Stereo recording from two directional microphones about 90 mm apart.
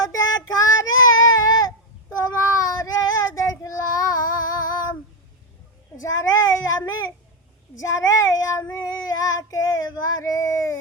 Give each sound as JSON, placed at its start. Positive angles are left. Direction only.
{"t": 0.1, "sound": "child singing", "side_deg": 40}
{"t": 1.2, "sound": "baby cry", "side_deg": 45}
{"t": 2.2, "sound": "child singing", "side_deg": 40}
{"t": 6.0, "sound": "child singing", "side_deg": 40}